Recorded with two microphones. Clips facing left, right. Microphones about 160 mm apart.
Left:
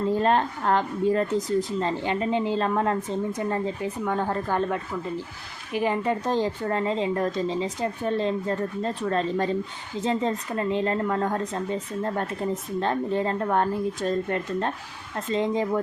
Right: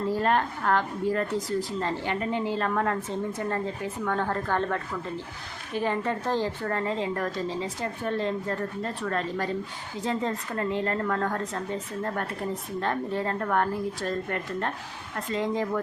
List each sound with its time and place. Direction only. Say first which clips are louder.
0.1 s speech: left 2 dB; 20° left (ahead or behind)